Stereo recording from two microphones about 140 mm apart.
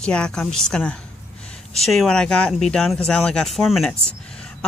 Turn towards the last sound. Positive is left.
turn(degrees=0)  # may be behind; listen again after turning